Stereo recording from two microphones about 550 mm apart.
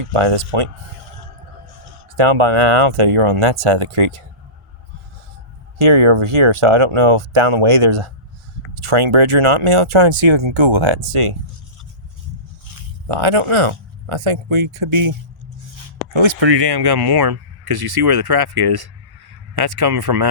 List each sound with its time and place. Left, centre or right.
0.1 s speech: right
2.1 s speech: right
5.8 s speech: right
13.1 s speech: right
16.1 s speech: right